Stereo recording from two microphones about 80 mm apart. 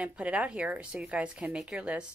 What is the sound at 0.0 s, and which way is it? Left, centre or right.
Speech, centre.